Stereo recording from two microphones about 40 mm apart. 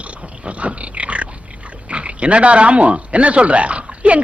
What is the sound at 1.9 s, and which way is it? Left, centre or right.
Speech, right.